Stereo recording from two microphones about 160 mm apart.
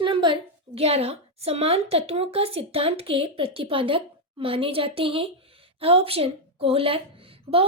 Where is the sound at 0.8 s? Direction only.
40° right (ahead or behind).